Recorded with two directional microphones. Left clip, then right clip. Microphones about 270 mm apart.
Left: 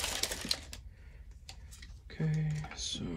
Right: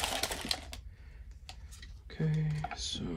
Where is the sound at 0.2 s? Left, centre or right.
Right.